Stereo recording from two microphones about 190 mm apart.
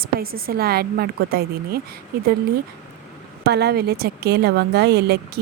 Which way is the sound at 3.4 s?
60° right (ahead or behind).